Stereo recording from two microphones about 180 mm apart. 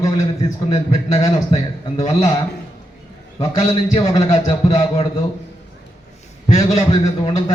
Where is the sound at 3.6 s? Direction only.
25° left (ahead or behind).